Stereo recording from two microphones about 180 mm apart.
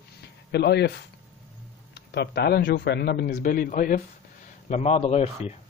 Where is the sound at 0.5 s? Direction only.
70° left (ahead or behind); by 4.0 s 50° left (ahead or behind).